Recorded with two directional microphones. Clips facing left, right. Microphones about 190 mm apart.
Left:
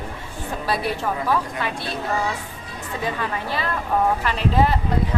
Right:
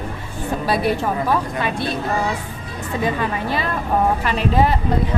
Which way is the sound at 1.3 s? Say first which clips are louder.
Right 3 dB; 20° right (ahead or behind).